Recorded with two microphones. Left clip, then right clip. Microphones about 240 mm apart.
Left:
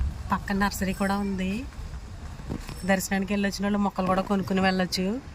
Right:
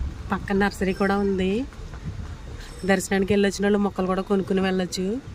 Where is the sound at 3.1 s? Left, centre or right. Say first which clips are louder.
Right 7 dB; centre.